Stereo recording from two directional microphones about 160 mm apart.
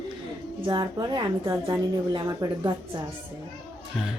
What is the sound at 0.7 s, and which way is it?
A woman's voice, 25° right (ahead or behind).